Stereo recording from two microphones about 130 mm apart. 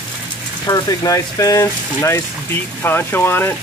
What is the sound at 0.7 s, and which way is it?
Speech, 30° left (ahead or behind).